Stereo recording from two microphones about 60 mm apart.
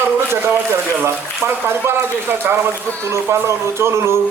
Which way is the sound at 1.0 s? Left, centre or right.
Right.